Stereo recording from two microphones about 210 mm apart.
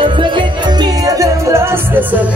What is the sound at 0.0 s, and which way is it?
Music, 25° right (ahead or behind).